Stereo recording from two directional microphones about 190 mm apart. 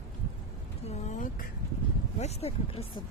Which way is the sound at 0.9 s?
40° left (ahead or behind).